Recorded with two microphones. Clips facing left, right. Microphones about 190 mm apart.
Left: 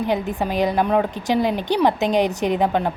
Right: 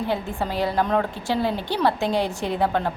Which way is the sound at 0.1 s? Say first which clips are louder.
Left 4 dB; 15° left (ahead or behind).